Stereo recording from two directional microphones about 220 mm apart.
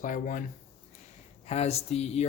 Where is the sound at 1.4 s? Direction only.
30° left (ahead or behind).